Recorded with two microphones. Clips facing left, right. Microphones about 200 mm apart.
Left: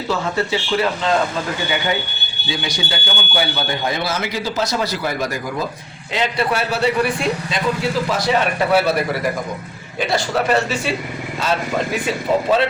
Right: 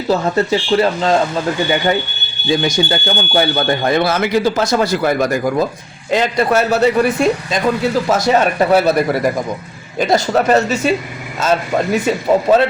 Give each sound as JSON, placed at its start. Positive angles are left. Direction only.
{"t": 0.1, "sound": "speech", "side_deg": -40}
{"t": 2.5, "sound": "speech", "side_deg": -45}